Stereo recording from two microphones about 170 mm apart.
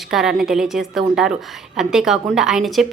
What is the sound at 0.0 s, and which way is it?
A woman's voice, 5° right (ahead or behind).